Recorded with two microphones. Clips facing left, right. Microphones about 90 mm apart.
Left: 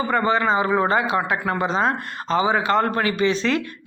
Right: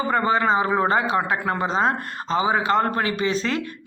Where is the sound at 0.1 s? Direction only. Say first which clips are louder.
Even; 35° right (ahead or behind).